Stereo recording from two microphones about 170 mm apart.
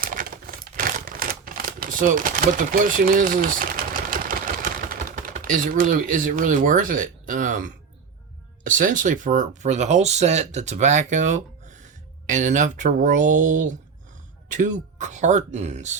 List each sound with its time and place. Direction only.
0.0 s typewriter: 55° right (ahead or behind)
4.1 s a sound: 55° right (ahead or behind)
8.6 s speech: 50° right (ahead or behind)